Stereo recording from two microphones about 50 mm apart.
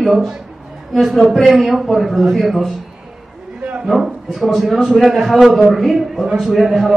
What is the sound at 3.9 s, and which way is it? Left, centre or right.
A man's voice, centre.